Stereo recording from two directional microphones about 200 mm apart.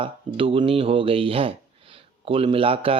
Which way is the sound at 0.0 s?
25° right (ahead or behind).